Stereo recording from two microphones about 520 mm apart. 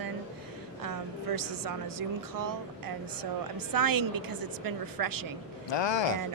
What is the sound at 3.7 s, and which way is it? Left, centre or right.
A woman's voice, right.